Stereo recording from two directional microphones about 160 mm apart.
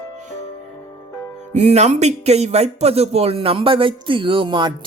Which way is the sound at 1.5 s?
45° right (ahead or behind).